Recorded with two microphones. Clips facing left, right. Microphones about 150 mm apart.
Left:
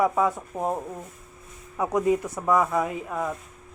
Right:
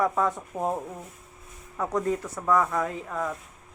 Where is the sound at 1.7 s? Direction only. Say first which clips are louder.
Left 4 dB; 10° left (ahead or behind).